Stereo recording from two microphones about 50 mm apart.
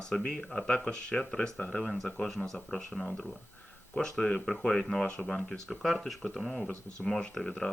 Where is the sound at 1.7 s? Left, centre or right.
Centre.